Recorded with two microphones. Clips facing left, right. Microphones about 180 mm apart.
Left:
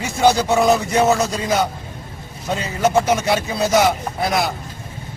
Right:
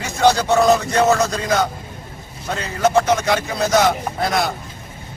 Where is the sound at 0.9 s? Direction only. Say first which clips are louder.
Even; 15° left (ahead or behind).